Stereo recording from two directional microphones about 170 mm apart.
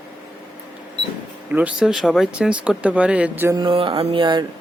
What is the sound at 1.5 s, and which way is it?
Speech, 10° right (ahead or behind).